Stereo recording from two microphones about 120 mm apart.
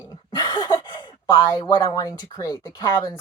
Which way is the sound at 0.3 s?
35° left (ahead or behind).